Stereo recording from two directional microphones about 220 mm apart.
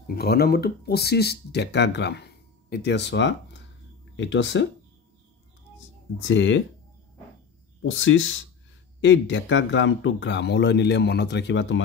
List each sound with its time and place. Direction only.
0.0 s speech: 45° left (ahead or behind)
6.1 s speech: 60° left (ahead or behind)
7.8 s speech: 60° left (ahead or behind)